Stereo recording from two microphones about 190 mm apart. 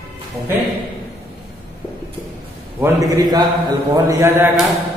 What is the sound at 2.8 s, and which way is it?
A man's voice, 15° right (ahead or behind).